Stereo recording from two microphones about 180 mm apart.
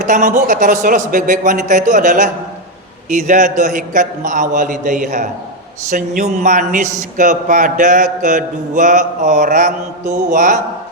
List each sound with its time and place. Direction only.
0.0 s mantra: 45° right (ahead or behind)